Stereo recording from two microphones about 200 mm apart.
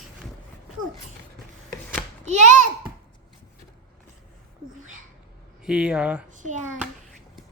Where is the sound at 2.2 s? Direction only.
35° right (ahead or behind).